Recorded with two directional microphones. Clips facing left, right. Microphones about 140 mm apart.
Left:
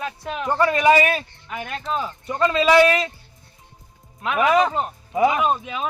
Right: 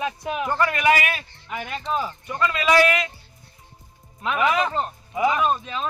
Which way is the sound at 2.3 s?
30° left (ahead or behind).